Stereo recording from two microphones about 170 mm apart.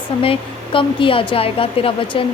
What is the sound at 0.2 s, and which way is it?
A woman's voice, 30° left (ahead or behind).